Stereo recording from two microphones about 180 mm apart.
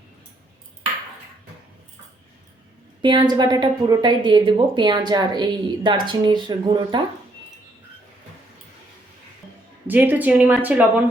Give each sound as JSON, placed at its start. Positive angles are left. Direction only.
{"t": 3.0, "sound": "a woman's voice", "side_deg": -25}
{"t": 9.8, "sound": "speech", "side_deg": -10}